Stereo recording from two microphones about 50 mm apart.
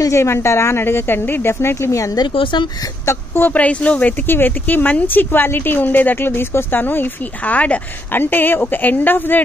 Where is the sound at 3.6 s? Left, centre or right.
Left.